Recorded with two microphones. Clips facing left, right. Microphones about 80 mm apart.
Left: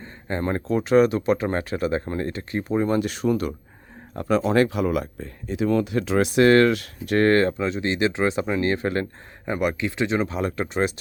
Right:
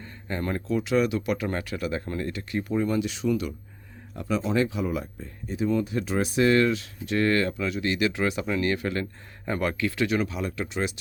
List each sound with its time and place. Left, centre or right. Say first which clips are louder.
0.3 s speech: left 4 dB; left
3.0 s speech: left 3 dB; left
7.5 s speech: left 3 dB; left
9.5 s speech: left 3 dB; centre
10.2 s speech: left 5 dB; left